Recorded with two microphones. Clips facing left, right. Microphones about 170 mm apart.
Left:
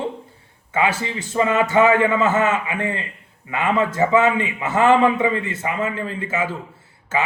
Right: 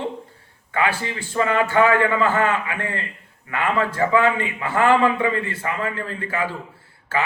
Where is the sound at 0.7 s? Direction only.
20° left (ahead or behind).